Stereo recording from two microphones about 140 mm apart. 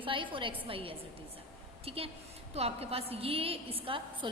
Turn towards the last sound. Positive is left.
turn(degrees=-40)  # may be behind; listen again after turning